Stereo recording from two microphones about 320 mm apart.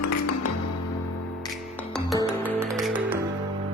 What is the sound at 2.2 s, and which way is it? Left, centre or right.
Music, centre.